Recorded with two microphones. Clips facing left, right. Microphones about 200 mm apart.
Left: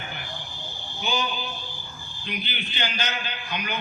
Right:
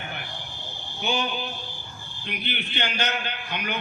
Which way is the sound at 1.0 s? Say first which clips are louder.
Right 1 dB; 60° right (ahead or behind).